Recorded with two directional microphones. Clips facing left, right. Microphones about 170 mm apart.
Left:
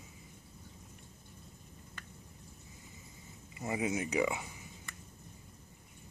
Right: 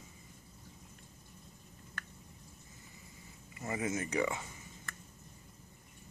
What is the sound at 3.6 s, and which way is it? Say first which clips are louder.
Speech: left 2 dB; 15° left (ahead or behind).